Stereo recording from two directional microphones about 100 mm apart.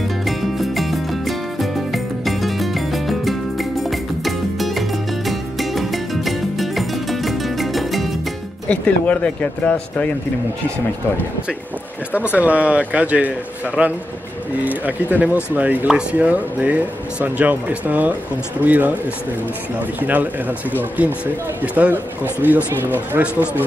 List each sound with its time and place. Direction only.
0.2 s music: centre (ahead or behind)
8.6 s speech: 15° left (ahead or behind)
12.4 s speech: 15° right (ahead or behind)
20.0 s speech: 15° right (ahead or behind)